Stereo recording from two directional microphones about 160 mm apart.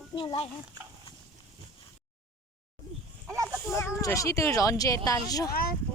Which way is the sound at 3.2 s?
15° right (ahead or behind).